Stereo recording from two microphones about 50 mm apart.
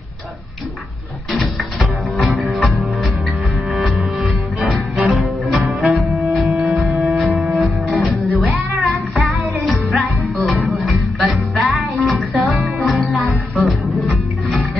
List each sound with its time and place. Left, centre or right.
1.3 s music: centre